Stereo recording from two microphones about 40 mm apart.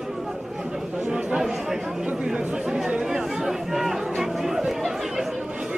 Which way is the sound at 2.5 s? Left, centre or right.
Right.